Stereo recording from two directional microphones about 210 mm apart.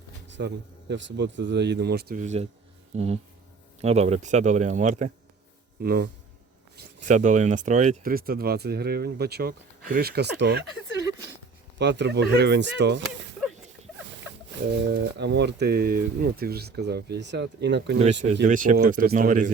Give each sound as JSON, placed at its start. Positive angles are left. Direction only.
{"t": 0.3, "sound": "speech", "side_deg": -55}
{"t": 5.8, "sound": "speech", "side_deg": -45}
{"t": 11.8, "sound": "speech", "side_deg": -55}
{"t": 14.8, "sound": "speech", "side_deg": -55}
{"t": 18.4, "sound": "speech", "side_deg": -40}